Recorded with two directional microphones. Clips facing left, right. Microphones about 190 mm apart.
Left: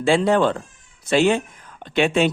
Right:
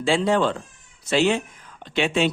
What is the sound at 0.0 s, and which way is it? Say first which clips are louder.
Speech: left 3 dB; 55° left (ahead or behind).